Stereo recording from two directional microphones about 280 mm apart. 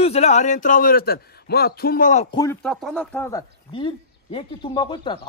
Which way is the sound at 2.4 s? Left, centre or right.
Centre.